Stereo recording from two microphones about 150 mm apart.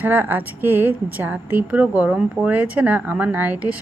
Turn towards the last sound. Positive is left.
turn(degrees=-10)  # may be behind; listen again after turning